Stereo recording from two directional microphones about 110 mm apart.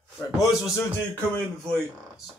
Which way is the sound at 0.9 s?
15° left (ahead or behind).